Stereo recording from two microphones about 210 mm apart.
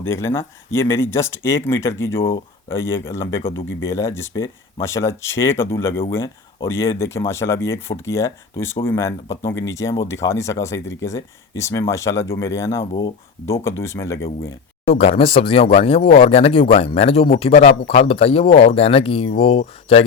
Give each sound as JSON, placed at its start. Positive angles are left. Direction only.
{"t": 0.1, "sound": "speech", "side_deg": 10}
{"t": 3.5, "sound": "speech", "side_deg": 65}
{"t": 3.8, "sound": "speech", "side_deg": 15}
{"t": 14.8, "sound": "speech", "side_deg": 25}